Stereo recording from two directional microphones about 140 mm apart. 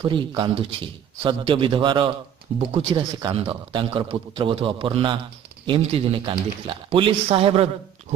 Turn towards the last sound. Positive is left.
turn(degrees=-45)  # may be behind; listen again after turning